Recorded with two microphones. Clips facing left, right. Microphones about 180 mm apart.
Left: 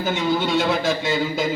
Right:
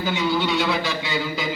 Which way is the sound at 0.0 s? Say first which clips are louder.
Left 1 dB; 45° left (ahead or behind).